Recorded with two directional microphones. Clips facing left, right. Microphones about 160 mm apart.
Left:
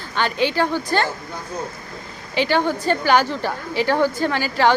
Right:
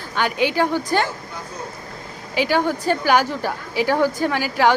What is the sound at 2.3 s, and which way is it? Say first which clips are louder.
A woman's voice: even; 5° right (ahead or behind).